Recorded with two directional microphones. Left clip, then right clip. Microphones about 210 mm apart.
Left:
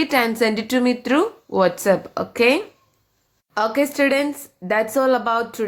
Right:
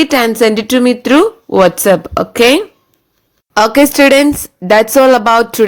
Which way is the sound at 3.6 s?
45° right (ahead or behind).